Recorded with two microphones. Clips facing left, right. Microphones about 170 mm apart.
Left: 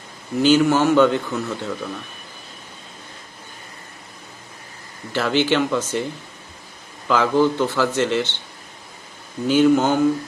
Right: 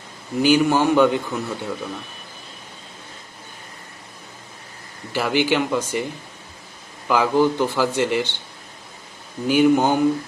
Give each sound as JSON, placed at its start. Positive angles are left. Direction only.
{"t": 0.4, "sound": "a man's voice", "side_deg": -15}
{"t": 5.1, "sound": "a man's voice", "side_deg": -10}
{"t": 7.1, "sound": "a man's voice", "side_deg": -15}
{"t": 9.5, "sound": "a man's voice", "side_deg": -15}